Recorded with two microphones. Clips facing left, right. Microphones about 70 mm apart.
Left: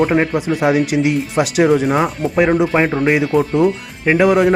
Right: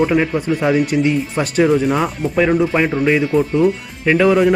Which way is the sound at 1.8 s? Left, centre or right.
Centre.